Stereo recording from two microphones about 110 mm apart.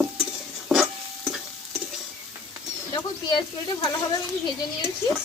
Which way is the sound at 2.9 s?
40° left (ahead or behind).